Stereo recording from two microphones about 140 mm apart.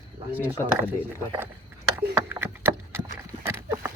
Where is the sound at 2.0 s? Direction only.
15° right (ahead or behind).